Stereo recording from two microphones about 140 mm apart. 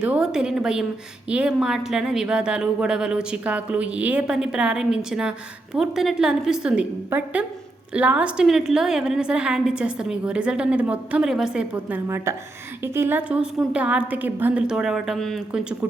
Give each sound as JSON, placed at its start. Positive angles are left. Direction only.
{"t": 0.0, "sound": "a woman's voice", "side_deg": -5}
{"t": 12.0, "sound": "a woman's voice", "side_deg": -20}